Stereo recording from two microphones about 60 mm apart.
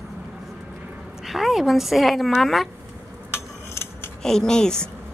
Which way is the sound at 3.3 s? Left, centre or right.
Left.